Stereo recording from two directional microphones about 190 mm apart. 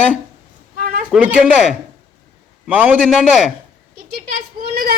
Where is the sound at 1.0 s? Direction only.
5° right (ahead or behind).